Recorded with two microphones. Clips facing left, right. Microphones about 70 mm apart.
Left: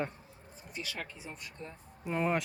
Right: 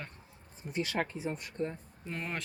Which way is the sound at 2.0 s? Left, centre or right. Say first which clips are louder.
Left 8 dB; centre.